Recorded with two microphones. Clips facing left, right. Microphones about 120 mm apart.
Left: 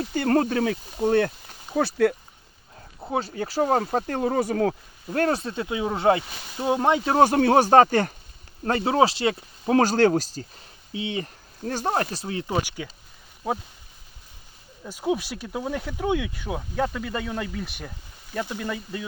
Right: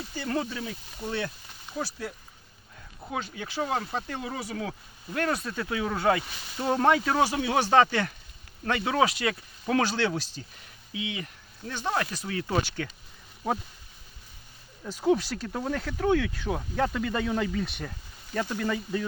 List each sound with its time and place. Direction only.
0.0 s speech: 60° left (ahead or behind)
0.9 s speech: 55° left (ahead or behind)
1.7 s speech: 65° left (ahead or behind)
3.0 s speech: 35° left (ahead or behind)
5.0 s speech: 35° left (ahead or behind)
6.7 s speech: 15° left (ahead or behind)
7.2 s speech: 50° left (ahead or behind)
8.6 s speech: 35° left (ahead or behind); by 12.9 s 15° left (ahead or behind)
14.8 s speech: 10° left (ahead or behind)